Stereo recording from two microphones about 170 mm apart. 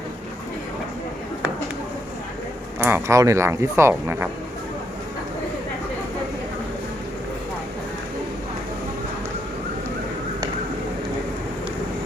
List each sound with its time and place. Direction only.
2.7 s speech: 15° right (ahead or behind)